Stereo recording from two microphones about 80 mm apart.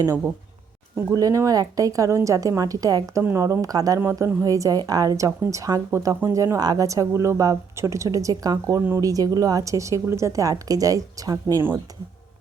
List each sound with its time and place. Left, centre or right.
1.1 s speech: right